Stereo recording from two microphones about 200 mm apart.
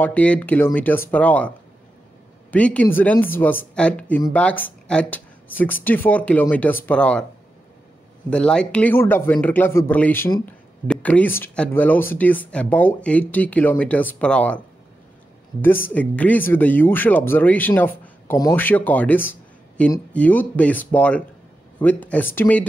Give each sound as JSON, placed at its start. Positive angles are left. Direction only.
{"t": 0.0, "sound": "speech", "side_deg": 5}
{"t": 2.5, "sound": "speech", "side_deg": 5}
{"t": 8.3, "sound": "speech", "side_deg": 5}
{"t": 15.9, "sound": "speech", "side_deg": 5}